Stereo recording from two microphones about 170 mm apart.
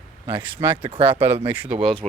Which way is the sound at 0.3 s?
25° right (ahead or behind).